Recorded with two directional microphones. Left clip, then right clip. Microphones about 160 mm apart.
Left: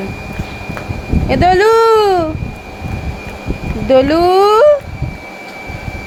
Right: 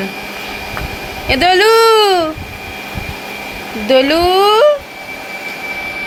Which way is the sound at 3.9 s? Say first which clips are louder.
Left 1 dB; 20° left (ahead or behind).